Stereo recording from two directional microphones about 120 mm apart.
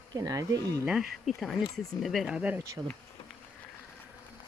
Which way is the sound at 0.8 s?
5° right (ahead or behind).